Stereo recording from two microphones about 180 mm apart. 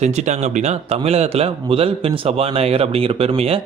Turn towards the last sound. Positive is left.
turn(degrees=-35)  # may be behind; listen again after turning